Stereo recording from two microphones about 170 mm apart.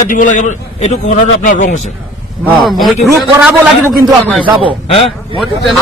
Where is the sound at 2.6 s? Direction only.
Centre (ahead or behind).